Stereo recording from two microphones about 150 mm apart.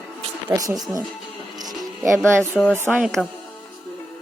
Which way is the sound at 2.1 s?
15° right (ahead or behind).